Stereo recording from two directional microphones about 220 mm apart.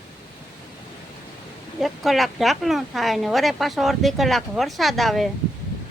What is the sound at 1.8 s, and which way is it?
Speech, centre (ahead or behind).